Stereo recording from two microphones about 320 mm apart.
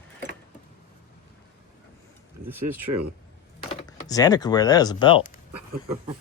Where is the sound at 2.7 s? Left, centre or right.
Right.